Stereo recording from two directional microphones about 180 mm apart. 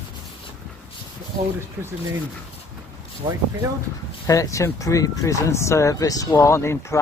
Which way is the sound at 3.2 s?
25° right (ahead or behind).